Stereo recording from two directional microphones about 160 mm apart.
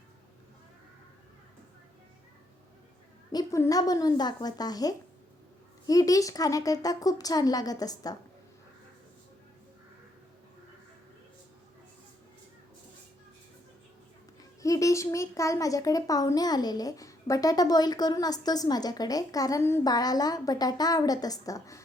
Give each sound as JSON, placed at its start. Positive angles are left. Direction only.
{"t": 3.3, "sound": "speech", "side_deg": 20}
{"t": 14.6, "sound": "speech", "side_deg": 20}